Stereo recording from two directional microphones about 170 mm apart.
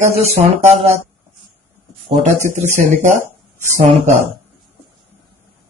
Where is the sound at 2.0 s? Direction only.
45° right (ahead or behind).